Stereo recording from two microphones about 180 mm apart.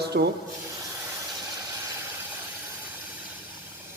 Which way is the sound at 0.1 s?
60° right (ahead or behind).